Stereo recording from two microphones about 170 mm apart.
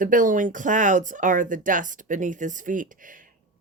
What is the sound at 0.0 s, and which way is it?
Speech, 50° right (ahead or behind).